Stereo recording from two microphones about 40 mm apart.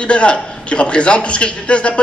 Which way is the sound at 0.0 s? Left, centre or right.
Left.